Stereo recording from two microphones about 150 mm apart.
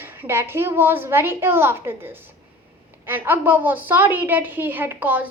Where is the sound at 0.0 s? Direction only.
15° right (ahead or behind).